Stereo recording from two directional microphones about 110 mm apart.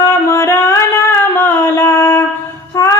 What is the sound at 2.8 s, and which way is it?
Child singing, 30° left (ahead or behind).